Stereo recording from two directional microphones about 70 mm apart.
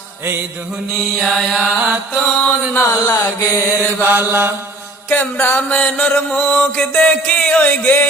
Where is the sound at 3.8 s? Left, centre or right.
Right.